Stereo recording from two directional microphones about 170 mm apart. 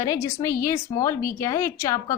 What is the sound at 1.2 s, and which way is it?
Speech, 55° left (ahead or behind).